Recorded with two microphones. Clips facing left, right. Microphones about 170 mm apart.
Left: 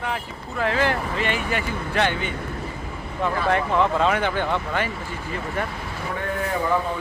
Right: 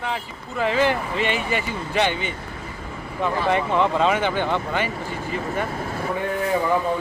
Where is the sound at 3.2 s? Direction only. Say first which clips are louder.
Right 1 dB; 10° right (ahead or behind).